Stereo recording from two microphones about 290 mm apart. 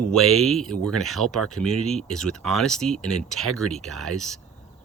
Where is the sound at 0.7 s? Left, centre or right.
Right.